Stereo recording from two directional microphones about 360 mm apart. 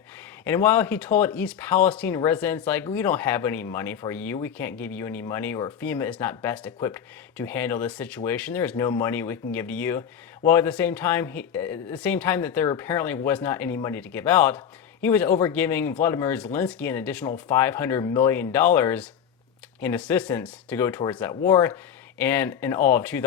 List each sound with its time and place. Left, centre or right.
0.4 s speech: centre